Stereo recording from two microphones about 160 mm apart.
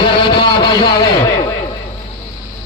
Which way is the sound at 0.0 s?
30° left (ahead or behind).